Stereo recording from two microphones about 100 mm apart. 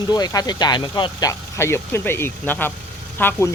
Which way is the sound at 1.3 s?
25° left (ahead or behind).